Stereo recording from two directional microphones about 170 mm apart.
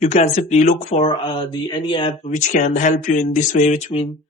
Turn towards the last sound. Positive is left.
turn(degrees=45)  # may be behind; listen again after turning